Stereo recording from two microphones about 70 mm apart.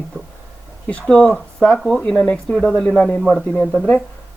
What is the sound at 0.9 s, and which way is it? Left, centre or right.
Speech, centre.